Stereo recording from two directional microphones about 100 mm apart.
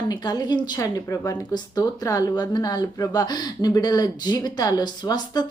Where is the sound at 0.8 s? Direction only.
35° left (ahead or behind).